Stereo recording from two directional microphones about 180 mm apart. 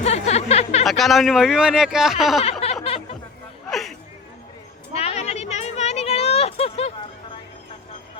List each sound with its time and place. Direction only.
0.0 s music: 35° left (ahead or behind)
0.9 s speech: centre (ahead or behind)
2.4 s a sound: 35° left (ahead or behind)
2.8 s music: 30° left (ahead or behind)
3.7 s chatter: centre (ahead or behind)
4.9 s a sound: 35° left (ahead or behind)